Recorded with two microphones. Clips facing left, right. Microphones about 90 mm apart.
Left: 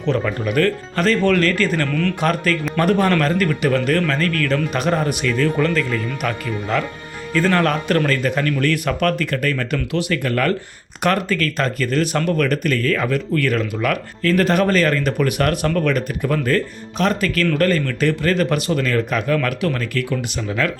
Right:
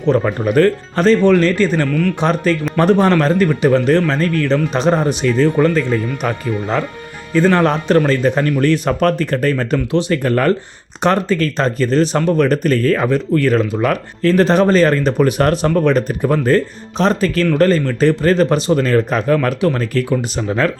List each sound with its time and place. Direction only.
0.1 s speech: 35° right (ahead or behind)
1.9 s speech: 5° right (ahead or behind)
2.2 s speech: 25° right (ahead or behind)